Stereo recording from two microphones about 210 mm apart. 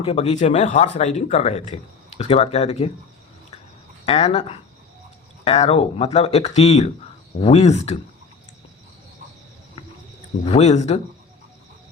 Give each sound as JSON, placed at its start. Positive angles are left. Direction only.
{"t": 0.0, "sound": "speech", "side_deg": 30}
{"t": 4.0, "sound": "speech", "side_deg": 30}
{"t": 10.4, "sound": "speech", "side_deg": 30}